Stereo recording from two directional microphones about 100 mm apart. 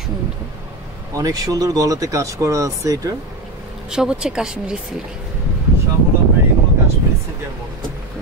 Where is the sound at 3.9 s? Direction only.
5° right (ahead or behind).